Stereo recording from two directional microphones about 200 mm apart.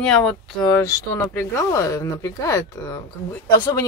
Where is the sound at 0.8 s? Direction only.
15° left (ahead or behind).